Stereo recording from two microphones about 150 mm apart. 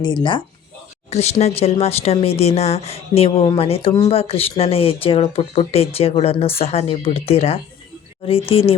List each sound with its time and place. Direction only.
0.0 s speech: 30° left (ahead or behind)
1.1 s speech: 45° left (ahead or behind)